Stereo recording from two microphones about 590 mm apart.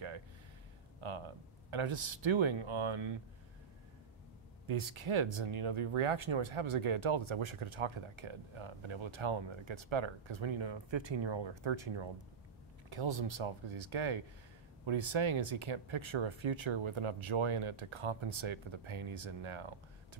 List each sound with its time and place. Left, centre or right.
1.0 s speech: right
4.6 s speech: right